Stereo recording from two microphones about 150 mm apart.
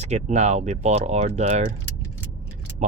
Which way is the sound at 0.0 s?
50° right (ahead or behind).